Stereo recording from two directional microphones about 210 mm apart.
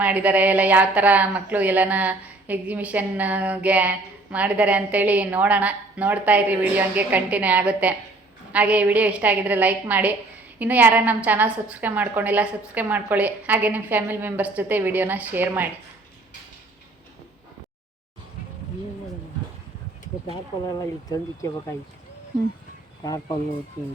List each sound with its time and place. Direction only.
0.0 s a woman's voice: 5° right (ahead or behind)
20.3 s speech: 20° left (ahead or behind)
23.0 s speech: 15° left (ahead or behind)